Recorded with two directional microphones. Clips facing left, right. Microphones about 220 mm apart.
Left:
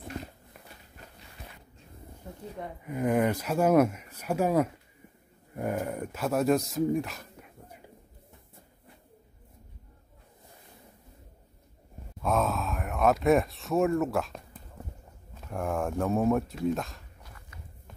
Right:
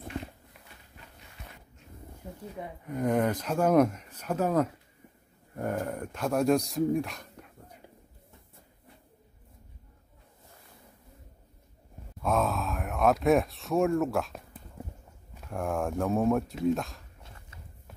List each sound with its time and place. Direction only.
2.8 s speech: 5° left (ahead or behind)
12.2 s speech: centre (ahead or behind)
17.2 s clip-clop: 25° right (ahead or behind)